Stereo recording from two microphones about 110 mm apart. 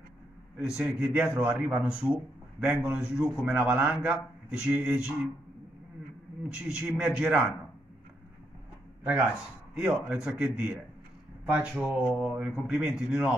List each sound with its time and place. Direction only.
0.6 s a man's voice: 5° right (ahead or behind)
6.5 s a man's voice: 5° right (ahead or behind)
9.8 s a man's voice: 10° right (ahead or behind)
12.6 s a man's voice: 20° right (ahead or behind)
12.9 s a man's voice: 5° right (ahead or behind)